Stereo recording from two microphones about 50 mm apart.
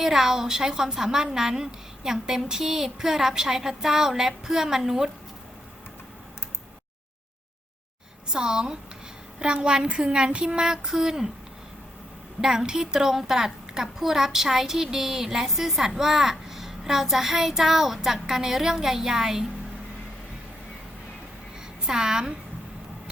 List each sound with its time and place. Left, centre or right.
0.0 s a woman's voice: centre
8.3 s a woman's voice: centre
12.4 s a woman's voice: centre
21.8 s a woman's voice: centre